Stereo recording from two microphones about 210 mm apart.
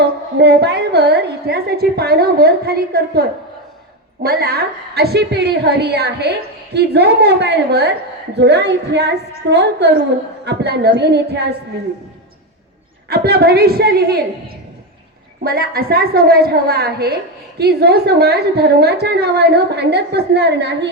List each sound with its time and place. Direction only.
0.0 s a woman's voice: 55° right (ahead or behind)
13.1 s a woman's voice: 50° right (ahead or behind)